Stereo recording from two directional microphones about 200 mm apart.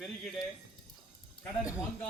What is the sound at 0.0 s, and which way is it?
Speech, centre (ahead or behind).